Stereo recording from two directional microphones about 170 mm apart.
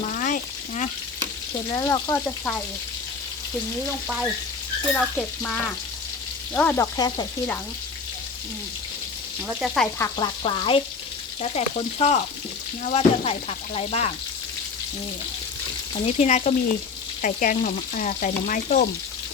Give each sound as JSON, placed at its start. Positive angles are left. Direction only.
{"t": 0.2, "sound": "frying", "side_deg": 50}
{"t": 1.7, "sound": "speech", "side_deg": 20}
{"t": 4.9, "sound": "speech", "side_deg": 5}
{"t": 6.9, "sound": "frying", "side_deg": 25}
{"t": 9.6, "sound": "frying", "side_deg": 0}
{"t": 10.0, "sound": "frying", "side_deg": 25}
{"t": 11.4, "sound": "speech", "side_deg": 40}
{"t": 16.1, "sound": "speech", "side_deg": 40}
{"t": 17.2, "sound": "frying", "side_deg": 50}